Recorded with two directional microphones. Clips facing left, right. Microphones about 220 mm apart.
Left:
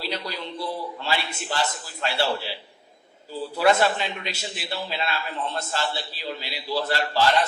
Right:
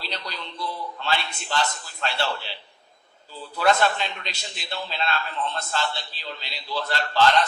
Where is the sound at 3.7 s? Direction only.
5° left (ahead or behind).